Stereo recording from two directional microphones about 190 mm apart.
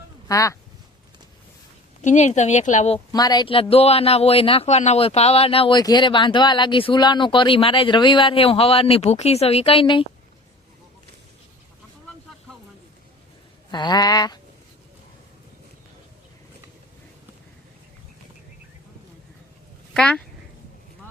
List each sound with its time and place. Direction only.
0.3 s speech: 15° left (ahead or behind)
2.0 s speech: 40° left (ahead or behind)
3.1 s a man's voice: 20° left (ahead or behind)
13.7 s a man's voice: 20° left (ahead or behind)
19.9 s speech: 5° left (ahead or behind)